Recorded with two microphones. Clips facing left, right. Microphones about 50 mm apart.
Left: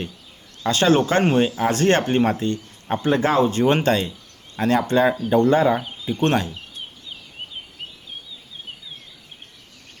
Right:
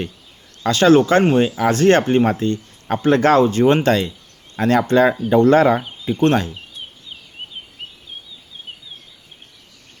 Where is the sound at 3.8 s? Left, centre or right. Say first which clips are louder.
Right 3 dB; right.